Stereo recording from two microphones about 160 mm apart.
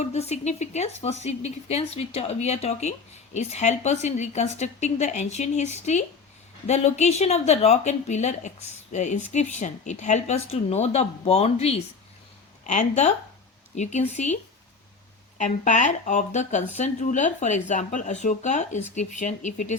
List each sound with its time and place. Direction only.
0.0 s speech: 45° left (ahead or behind)
15.4 s speech: 50° left (ahead or behind)